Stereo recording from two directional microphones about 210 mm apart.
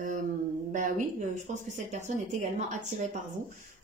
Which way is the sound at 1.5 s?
35° right (ahead or behind).